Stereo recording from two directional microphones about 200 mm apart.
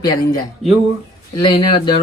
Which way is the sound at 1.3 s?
25° left (ahead or behind).